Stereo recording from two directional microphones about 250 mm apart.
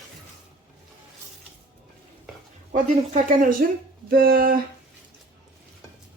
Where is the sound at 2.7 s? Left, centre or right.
Right.